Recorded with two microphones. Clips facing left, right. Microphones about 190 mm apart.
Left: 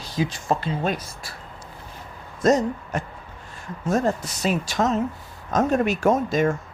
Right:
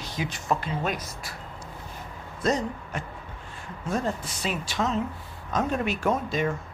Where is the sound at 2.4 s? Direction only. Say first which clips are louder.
Left 7 dB; 45° left (ahead or behind).